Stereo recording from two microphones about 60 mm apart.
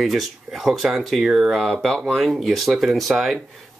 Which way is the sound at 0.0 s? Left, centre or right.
Centre.